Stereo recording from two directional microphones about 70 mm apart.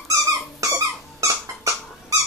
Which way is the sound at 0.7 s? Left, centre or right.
Right.